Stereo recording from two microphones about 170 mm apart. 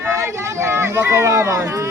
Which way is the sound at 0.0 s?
15° right (ahead or behind).